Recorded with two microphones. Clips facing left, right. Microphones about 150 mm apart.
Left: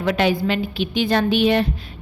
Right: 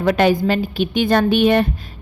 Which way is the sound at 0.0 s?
45° right (ahead or behind).